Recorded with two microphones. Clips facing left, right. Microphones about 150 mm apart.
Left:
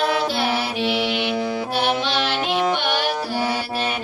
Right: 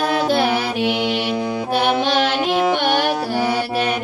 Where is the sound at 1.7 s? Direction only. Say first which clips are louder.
Right 6 dB; 55° right (ahead or behind).